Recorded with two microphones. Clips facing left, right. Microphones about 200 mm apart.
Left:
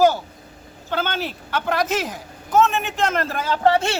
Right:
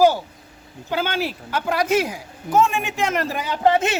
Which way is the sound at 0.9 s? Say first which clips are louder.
Right 2 dB; 10° right (ahead or behind).